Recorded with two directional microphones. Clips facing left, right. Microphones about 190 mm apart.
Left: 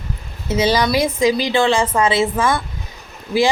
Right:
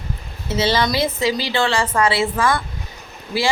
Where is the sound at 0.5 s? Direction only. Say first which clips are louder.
Left 3 dB; 15° left (ahead or behind).